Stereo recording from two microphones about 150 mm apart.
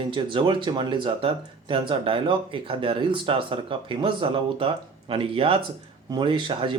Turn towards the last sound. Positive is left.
turn(degrees=-35)  # may be behind; listen again after turning